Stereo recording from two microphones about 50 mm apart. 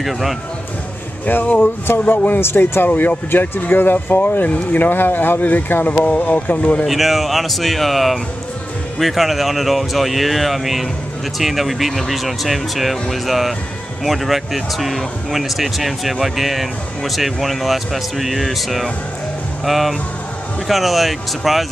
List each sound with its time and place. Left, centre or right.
0.0 s speech: centre
1.2 s speech: left
2.4 s speech: left
2.9 s speech: left
3.3 s speech: left
6.9 s speech: centre